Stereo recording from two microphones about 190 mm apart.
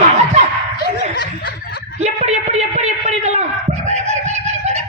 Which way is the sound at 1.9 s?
35° right (ahead or behind).